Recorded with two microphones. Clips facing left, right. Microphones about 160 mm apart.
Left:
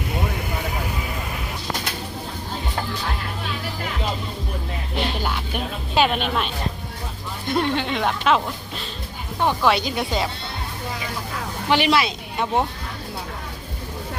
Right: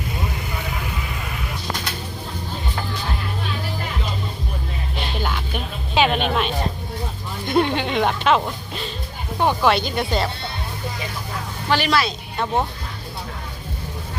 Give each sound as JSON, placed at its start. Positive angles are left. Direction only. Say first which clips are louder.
{"t": 5.9, "sound": "a woman's voice", "louder": "right 1 dB", "side_deg": 0}
{"t": 7.5, "sound": "a woman's voice", "louder": "right 3 dB", "side_deg": 0}
{"t": 11.7, "sound": "speech", "louder": "left 1 dB", "side_deg": 20}